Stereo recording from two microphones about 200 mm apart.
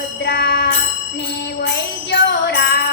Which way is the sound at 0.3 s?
55° left (ahead or behind).